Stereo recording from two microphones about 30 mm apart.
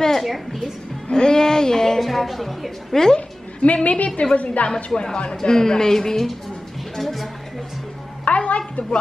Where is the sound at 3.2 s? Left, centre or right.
Left.